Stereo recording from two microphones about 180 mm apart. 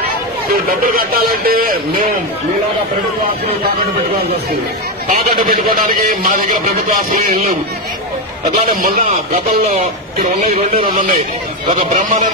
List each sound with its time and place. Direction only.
0.5 s speech: 55° right (ahead or behind)
5.0 s a man's voice: 50° right (ahead or behind)
8.6 s a man's voice: 50° right (ahead or behind)